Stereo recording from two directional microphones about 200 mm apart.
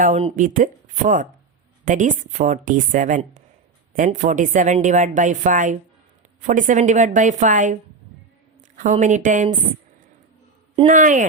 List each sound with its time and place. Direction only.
0.0 s a woman's voice: 35° right (ahead or behind)
10.8 s a woman's voice: 40° right (ahead or behind)